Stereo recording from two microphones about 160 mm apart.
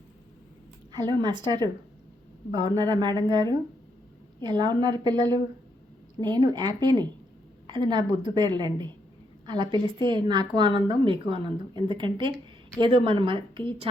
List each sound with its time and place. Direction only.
0.9 s a woman's voice: 25° right (ahead or behind)